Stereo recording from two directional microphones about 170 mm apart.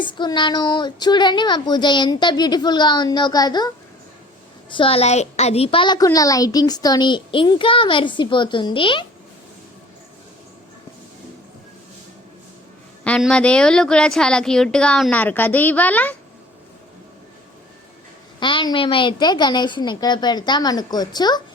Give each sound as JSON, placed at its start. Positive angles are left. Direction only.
{"t": 0.0, "sound": "a woman's voice", "side_deg": 25}
{"t": 4.7, "sound": "a woman's voice", "side_deg": 30}
{"t": 13.1, "sound": "a woman's voice", "side_deg": 5}
{"t": 18.3, "sound": "a woman's voice", "side_deg": 25}